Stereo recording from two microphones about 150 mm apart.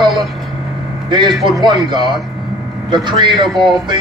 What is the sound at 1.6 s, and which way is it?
Speech, 30° right (ahead or behind).